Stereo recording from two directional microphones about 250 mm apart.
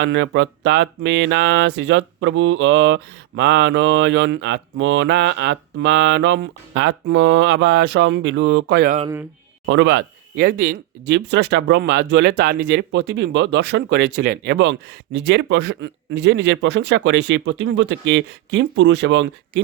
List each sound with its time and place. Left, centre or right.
0.0 s speech: right